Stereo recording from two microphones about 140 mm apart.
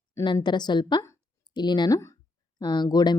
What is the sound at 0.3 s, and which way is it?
Speech, 30° left (ahead or behind).